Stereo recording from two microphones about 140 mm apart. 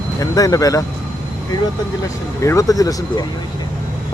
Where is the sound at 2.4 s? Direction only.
20° left (ahead or behind).